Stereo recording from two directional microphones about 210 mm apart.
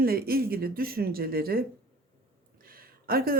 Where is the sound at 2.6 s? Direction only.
45° right (ahead or behind).